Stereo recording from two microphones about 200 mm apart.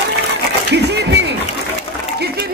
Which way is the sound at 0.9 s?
55° right (ahead or behind).